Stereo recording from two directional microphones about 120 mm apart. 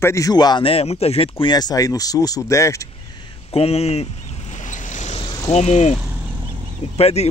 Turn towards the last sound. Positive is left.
turn(degrees=60)  # may be behind; listen again after turning